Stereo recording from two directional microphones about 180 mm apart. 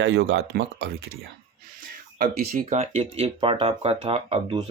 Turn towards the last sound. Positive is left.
turn(degrees=-35)  # may be behind; listen again after turning